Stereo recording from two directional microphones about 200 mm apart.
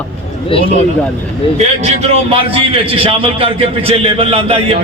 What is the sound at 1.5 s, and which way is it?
A man's voice, 35° right (ahead or behind).